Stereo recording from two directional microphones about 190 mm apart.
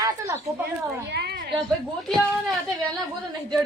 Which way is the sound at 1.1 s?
60° right (ahead or behind).